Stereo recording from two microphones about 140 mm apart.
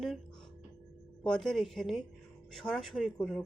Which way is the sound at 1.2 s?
5° left (ahead or behind).